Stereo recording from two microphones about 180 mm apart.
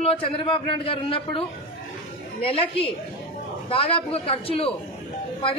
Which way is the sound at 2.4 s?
30° left (ahead or behind).